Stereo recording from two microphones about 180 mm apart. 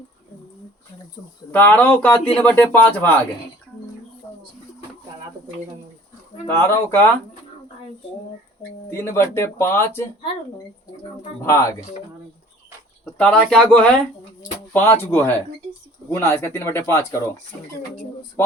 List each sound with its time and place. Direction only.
1.5 s speech: 10° left (ahead or behind)
6.5 s speech: 15° left (ahead or behind)
8.9 s speech: 15° left (ahead or behind)
11.4 s speech: 15° left (ahead or behind)
13.1 s speech: 5° left (ahead or behind)